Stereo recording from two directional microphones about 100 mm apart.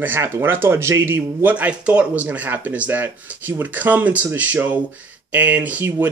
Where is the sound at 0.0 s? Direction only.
25° right (ahead or behind).